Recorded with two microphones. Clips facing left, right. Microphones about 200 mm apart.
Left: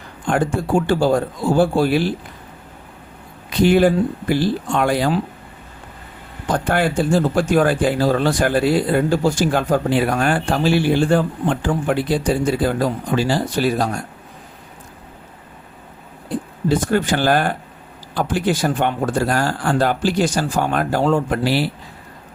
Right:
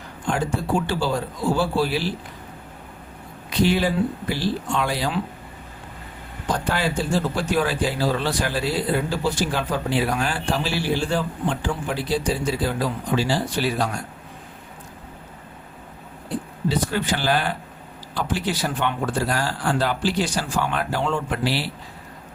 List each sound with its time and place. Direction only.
0.3 s speech: 55° left (ahead or behind)
3.6 s speech: 50° left (ahead or behind)
6.7 s speech: 55° left (ahead or behind)
16.6 s speech: 50° left (ahead or behind)